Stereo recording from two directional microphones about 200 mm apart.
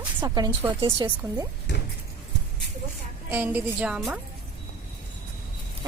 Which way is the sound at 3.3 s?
10° right (ahead or behind).